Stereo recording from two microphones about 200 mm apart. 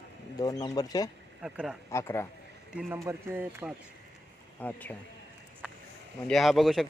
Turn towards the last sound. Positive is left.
turn(degrees=0)  # may be behind; listen again after turning